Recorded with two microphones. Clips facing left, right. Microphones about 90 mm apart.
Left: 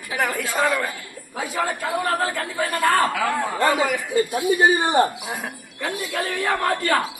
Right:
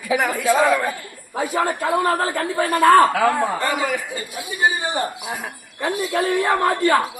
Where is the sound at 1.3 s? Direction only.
45° right (ahead or behind).